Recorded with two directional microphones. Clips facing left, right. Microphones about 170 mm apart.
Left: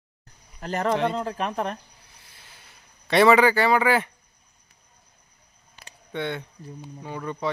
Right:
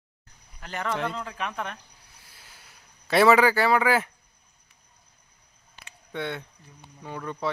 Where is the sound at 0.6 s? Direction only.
40° left (ahead or behind).